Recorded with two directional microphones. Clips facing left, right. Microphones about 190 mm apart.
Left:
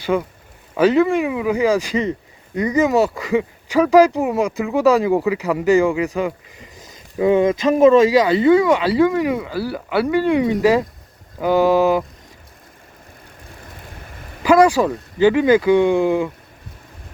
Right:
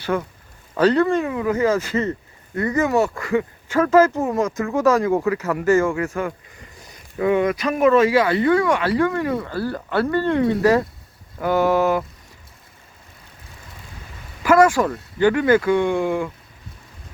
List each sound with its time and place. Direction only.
0.0 s speech: 15° left (ahead or behind)
14.4 s speech: 15° left (ahead or behind)